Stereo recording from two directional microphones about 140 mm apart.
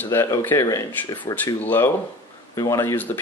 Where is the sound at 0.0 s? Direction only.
20° left (ahead or behind).